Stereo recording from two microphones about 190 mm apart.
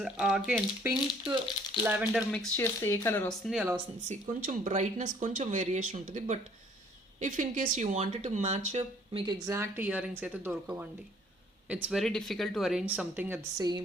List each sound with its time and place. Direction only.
0.0 s speech: 5° right (ahead or behind)
2.3 s speech: 10° left (ahead or behind)
4.1 s speech: 45° right (ahead or behind)
9.2 s speech: 15° right (ahead or behind)